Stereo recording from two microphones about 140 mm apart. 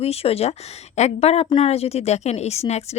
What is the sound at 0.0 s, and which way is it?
A woman's voice, 45° left (ahead or behind).